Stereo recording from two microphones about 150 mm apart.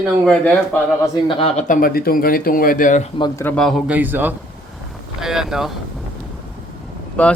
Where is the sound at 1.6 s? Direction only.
70° left (ahead or behind).